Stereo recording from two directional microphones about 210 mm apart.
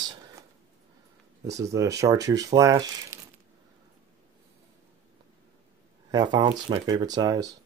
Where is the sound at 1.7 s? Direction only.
15° right (ahead or behind).